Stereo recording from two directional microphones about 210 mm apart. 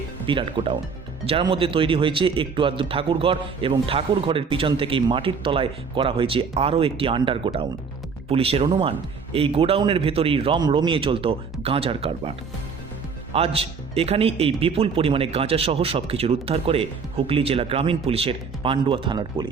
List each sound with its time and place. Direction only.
0.3 s speech: 25° right (ahead or behind)
13.3 s speech: 25° right (ahead or behind)